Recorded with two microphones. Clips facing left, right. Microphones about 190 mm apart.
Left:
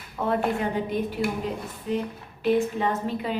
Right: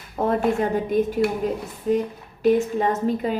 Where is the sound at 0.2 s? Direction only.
45° right (ahead or behind).